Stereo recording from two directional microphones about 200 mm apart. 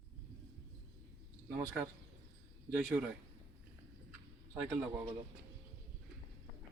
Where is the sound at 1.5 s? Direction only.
15° right (ahead or behind).